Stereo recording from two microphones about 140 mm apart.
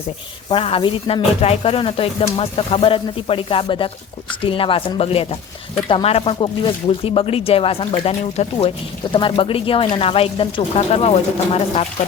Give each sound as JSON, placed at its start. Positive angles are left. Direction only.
{"t": 0.4, "sound": "speech", "side_deg": 40}
{"t": 9.1, "sound": "speech", "side_deg": 35}